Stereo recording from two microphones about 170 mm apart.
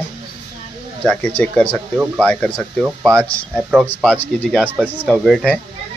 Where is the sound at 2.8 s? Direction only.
20° right (ahead or behind).